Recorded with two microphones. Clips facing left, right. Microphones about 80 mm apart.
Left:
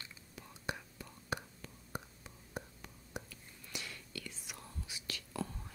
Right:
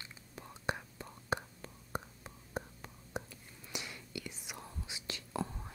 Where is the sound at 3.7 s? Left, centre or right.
Centre.